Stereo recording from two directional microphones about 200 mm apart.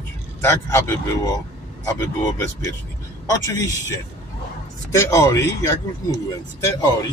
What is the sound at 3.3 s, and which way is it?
Speech, 15° left (ahead or behind).